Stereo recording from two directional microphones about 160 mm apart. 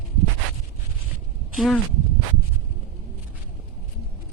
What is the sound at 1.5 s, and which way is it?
Speech, centre (ahead or behind).